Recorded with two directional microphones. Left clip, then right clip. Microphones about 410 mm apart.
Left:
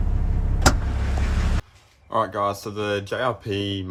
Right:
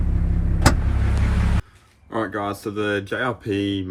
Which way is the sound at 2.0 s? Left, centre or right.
Left.